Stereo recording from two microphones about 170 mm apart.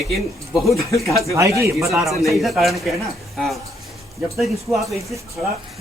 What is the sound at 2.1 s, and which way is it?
Speech, centre (ahead or behind).